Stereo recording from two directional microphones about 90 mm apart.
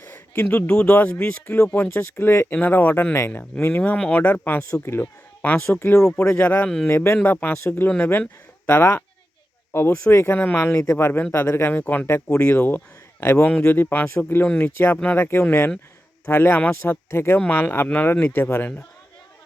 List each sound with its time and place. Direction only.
0.3 s speech: 20° left (ahead or behind)
10.3 s speech: 20° left (ahead or behind)
10.6 s speech: 35° left (ahead or behind)
14.4 s speech: 10° left (ahead or behind)
15.0 s speech: 25° left (ahead or behind)
16.8 s speech: 25° left (ahead or behind)